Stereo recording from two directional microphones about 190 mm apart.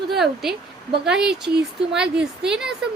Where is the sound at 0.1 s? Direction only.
Centre (ahead or behind).